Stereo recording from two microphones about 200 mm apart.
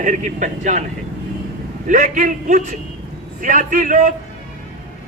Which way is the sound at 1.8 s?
40° right (ahead or behind).